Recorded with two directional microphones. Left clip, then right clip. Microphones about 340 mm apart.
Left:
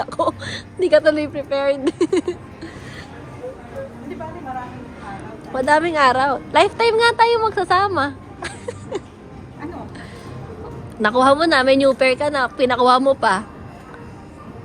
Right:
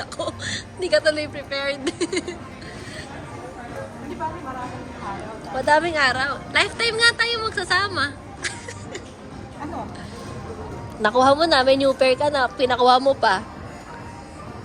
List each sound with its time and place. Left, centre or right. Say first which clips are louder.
0.0 s speech: left 7 dB; centre
5.5 s a woman's voice: left 3 dB; centre
11.0 s a woman's voice: left 2 dB; centre